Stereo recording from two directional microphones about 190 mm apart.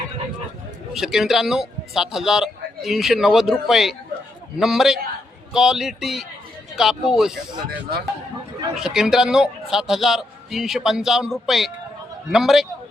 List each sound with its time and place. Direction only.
0.9 s a man's voice: centre (ahead or behind)
7.7 s speech: 55° right (ahead or behind)
8.7 s a man's voice: 5° right (ahead or behind)